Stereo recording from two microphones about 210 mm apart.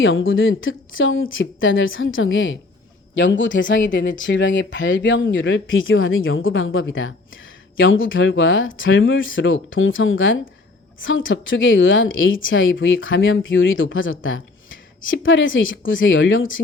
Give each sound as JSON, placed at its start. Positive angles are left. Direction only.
{"t": 0.0, "sound": "a woman's voice", "side_deg": 65}